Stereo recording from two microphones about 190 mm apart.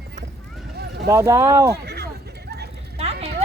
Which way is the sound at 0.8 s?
55° right (ahead or behind).